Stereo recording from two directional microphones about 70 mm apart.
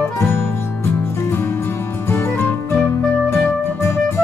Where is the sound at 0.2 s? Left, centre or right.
Left.